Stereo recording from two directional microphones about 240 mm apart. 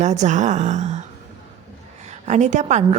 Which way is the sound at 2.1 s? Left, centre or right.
Right.